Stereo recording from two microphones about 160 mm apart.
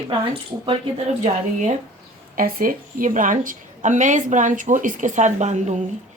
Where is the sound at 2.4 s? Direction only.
60° right (ahead or behind).